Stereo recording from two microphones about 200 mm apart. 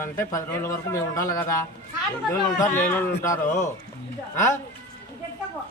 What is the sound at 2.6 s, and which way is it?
Speech, 10° left (ahead or behind).